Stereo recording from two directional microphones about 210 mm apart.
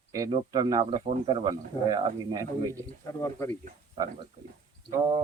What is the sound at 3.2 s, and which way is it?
Speech, 15° left (ahead or behind).